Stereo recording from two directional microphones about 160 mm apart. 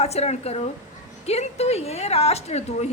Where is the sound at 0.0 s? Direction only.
40° left (ahead or behind).